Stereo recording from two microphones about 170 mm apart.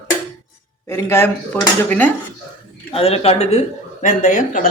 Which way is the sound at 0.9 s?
15° left (ahead or behind).